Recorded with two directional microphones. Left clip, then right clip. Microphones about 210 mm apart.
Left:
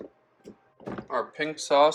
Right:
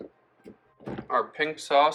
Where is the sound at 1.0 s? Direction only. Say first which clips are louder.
Right 3 dB; 15° left (ahead or behind).